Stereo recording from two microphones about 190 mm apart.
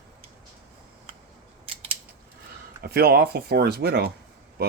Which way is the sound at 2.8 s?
55° right (ahead or behind).